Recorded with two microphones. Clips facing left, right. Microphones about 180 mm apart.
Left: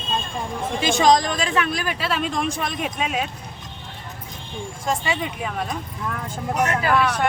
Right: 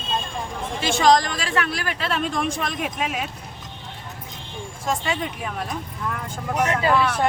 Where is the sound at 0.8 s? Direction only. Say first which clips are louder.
Even; 15° left (ahead or behind).